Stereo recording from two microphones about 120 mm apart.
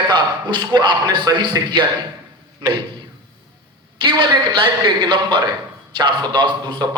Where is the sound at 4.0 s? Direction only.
40° right (ahead or behind).